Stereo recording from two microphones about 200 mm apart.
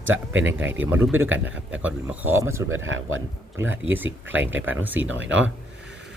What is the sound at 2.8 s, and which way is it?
Speech, 75° right (ahead or behind).